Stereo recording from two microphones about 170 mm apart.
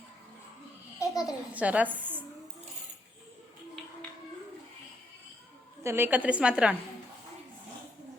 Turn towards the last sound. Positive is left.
turn(degrees=-5)  # may be behind; listen again after turning